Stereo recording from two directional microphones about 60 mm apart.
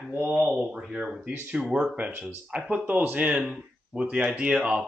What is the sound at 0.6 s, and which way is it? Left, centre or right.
Speech, centre.